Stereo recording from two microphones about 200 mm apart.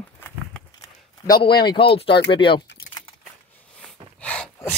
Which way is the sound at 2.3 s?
25° left (ahead or behind).